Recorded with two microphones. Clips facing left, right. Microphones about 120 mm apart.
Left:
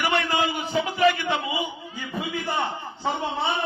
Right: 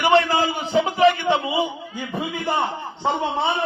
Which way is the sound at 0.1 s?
30° right (ahead or behind).